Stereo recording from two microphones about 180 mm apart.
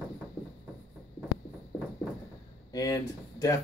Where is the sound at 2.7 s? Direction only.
20° left (ahead or behind).